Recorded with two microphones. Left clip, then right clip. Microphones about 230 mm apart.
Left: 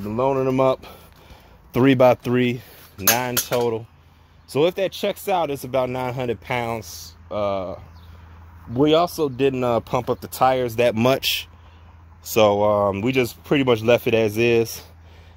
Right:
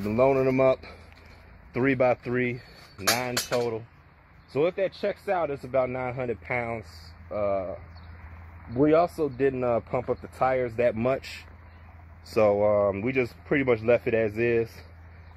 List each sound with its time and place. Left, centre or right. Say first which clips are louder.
0.3 s speech: left 6 dB; left
1.7 s speech: left 8 dB; left
8.7 s speech: left 4 dB; left
9.5 s speech: left 5 dB; left
12.4 s speech: left 5 dB; left